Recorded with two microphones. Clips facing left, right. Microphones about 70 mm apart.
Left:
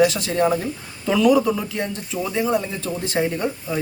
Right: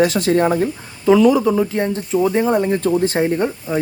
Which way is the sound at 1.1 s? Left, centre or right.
Right.